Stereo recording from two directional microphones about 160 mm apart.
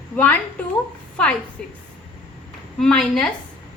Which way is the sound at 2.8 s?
5° left (ahead or behind).